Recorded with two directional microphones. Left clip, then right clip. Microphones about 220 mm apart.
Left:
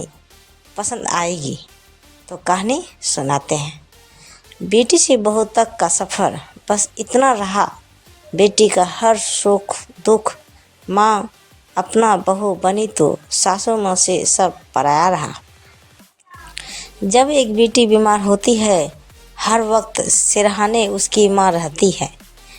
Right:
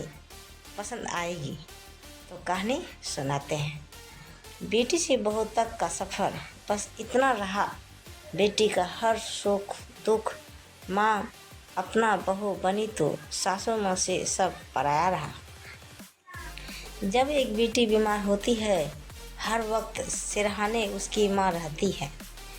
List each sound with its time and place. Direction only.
0.8 s a woman's voice: 45° left (ahead or behind)
16.6 s a woman's voice: 45° left (ahead or behind)